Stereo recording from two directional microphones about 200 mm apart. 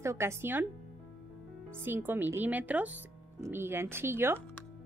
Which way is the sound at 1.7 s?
10° right (ahead or behind).